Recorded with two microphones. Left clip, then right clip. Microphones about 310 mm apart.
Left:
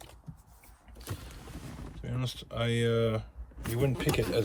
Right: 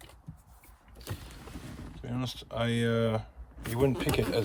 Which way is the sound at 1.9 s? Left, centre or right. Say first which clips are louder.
Right 2 dB; centre.